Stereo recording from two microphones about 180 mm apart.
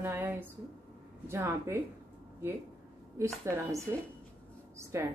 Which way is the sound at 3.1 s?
15° right (ahead or behind).